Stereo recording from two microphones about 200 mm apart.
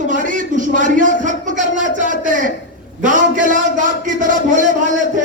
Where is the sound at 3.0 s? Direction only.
40° right (ahead or behind).